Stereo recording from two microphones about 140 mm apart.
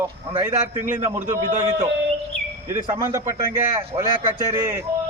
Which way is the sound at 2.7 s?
20° right (ahead or behind).